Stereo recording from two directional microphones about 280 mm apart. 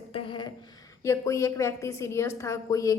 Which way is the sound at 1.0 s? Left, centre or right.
Centre.